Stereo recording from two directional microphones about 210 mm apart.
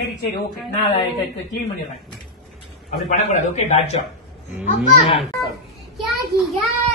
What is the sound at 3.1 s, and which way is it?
Speech, 35° left (ahead or behind).